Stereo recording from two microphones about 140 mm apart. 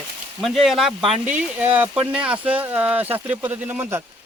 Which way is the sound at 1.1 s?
10° right (ahead or behind).